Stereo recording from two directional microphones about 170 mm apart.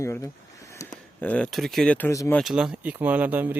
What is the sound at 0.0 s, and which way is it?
Speech, 20° left (ahead or behind).